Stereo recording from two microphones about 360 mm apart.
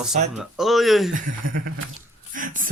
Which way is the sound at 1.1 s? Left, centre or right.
Right.